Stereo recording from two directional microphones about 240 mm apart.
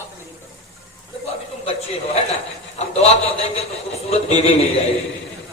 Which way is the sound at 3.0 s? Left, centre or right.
Left.